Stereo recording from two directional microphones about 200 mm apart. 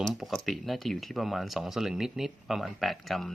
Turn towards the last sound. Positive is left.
turn(degrees=0)  # may be behind; listen again after turning